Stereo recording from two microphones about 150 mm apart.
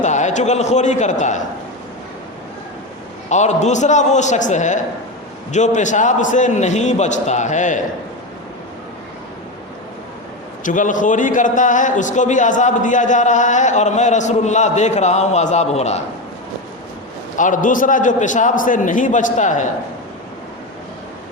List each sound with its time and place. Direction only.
0.0 s a man's voice: 50° left (ahead or behind)
3.2 s a man's voice: 50° left (ahead or behind)
10.6 s a man's voice: 60° left (ahead or behind)
17.3 s a man's voice: 60° left (ahead or behind)